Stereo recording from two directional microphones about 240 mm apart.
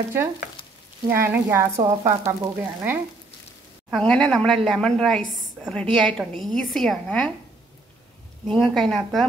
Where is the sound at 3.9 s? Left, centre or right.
Centre.